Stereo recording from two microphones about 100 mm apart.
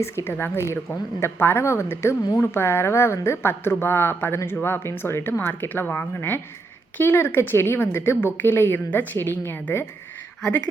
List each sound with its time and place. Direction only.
0.0 s a woman's voice: 25° left (ahead or behind)